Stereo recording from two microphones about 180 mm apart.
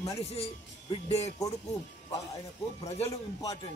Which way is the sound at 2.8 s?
35° left (ahead or behind).